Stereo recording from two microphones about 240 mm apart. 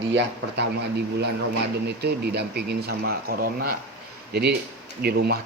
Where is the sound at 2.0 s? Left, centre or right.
Right.